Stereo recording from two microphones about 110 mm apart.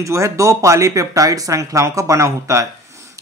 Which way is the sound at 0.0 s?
30° right (ahead or behind).